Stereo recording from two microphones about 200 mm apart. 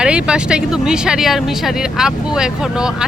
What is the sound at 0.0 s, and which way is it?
Speech, 5° right (ahead or behind).